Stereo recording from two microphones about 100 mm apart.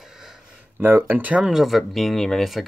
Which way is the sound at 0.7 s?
20° right (ahead or behind).